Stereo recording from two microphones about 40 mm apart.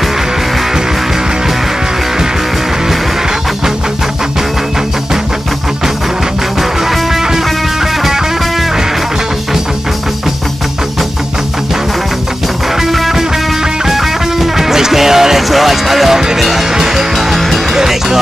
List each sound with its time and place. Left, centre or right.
6.8 s music: centre
12.8 s music: centre